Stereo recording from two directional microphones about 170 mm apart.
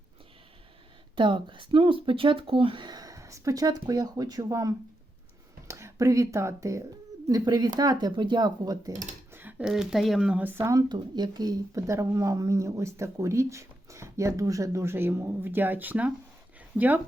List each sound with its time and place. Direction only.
1.1 s speech: 30° right (ahead or behind)
9.3 s speech: 10° right (ahead or behind)